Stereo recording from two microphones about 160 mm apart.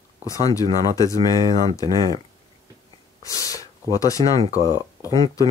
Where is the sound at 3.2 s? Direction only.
20° left (ahead or behind).